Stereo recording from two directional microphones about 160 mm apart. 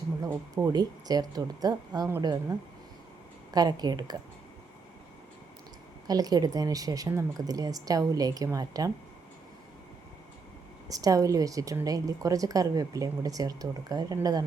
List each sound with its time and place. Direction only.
0.2 s a woman's voice: 20° right (ahead or behind)
6.1 s a woman's voice: 25° right (ahead or behind)
10.8 s a woman's voice: 20° right (ahead or behind)